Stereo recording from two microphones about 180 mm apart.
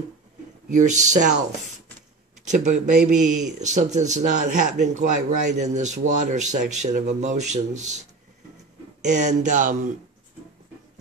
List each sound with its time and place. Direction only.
0.7 s speech: 45° right (ahead or behind)
2.4 s speech: 40° right (ahead or behind)
9.0 s speech: 40° right (ahead or behind)